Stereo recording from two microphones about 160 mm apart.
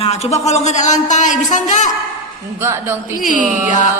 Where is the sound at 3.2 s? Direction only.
55° left (ahead or behind).